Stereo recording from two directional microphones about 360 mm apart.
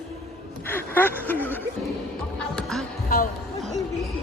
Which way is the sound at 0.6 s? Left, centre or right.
Centre.